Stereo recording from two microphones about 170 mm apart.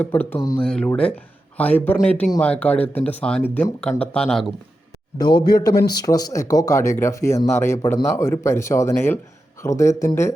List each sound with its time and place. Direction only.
0.0 s speech: 10° left (ahead or behind)
5.1 s speech: 25° left (ahead or behind)